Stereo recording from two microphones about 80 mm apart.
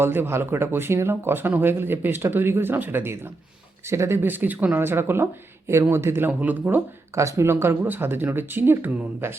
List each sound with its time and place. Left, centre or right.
0.0 s speech: right
7.2 s speech: right